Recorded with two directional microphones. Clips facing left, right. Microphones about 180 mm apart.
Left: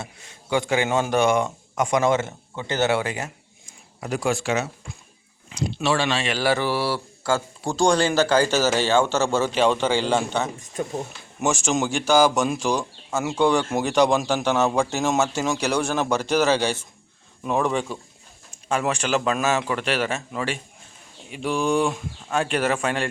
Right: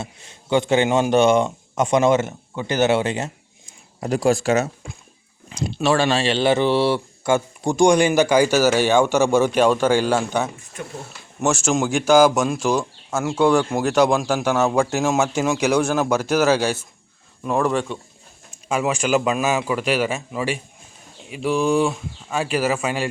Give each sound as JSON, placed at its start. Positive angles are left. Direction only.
{"t": 0.5, "sound": "a man's voice", "side_deg": -25}
{"t": 4.0, "sound": "speech", "side_deg": -35}
{"t": 11.5, "sound": "a man's voice", "side_deg": 0}
{"t": 18.7, "sound": "a man's voice", "side_deg": -10}